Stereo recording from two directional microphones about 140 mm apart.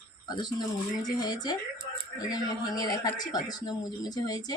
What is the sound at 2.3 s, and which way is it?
Speech, 25° left (ahead or behind).